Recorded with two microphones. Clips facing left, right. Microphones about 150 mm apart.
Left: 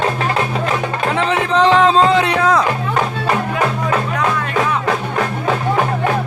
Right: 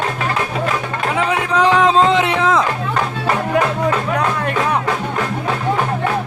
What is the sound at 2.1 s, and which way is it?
Music, 20° right (ahead or behind).